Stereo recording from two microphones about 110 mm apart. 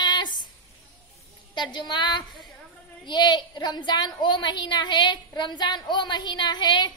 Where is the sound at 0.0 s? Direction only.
45° left (ahead or behind).